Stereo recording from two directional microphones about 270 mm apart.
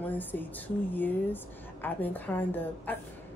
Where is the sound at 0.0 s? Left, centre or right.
Centre.